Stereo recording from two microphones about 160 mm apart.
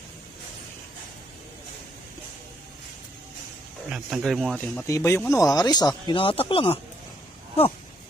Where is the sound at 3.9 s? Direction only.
Centre (ahead or behind).